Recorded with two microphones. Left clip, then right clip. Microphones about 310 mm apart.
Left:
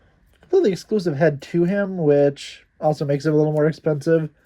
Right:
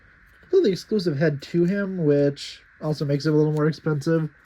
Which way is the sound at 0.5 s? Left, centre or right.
Centre.